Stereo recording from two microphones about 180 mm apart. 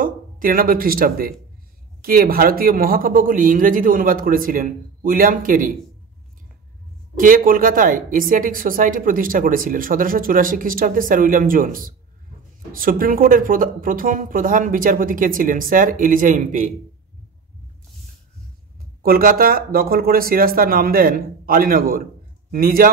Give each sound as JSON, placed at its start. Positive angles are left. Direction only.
{"t": 0.0, "sound": "speech", "side_deg": -50}
{"t": 7.2, "sound": "speech", "side_deg": -50}
{"t": 19.0, "sound": "speech", "side_deg": -55}